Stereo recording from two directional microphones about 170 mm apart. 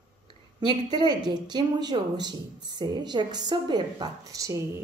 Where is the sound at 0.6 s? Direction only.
25° right (ahead or behind).